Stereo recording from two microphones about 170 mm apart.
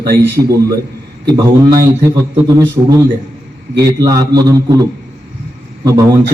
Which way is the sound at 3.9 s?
25° right (ahead or behind).